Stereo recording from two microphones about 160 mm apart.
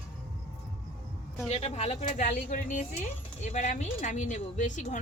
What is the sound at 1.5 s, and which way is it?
Speech, 40° left (ahead or behind).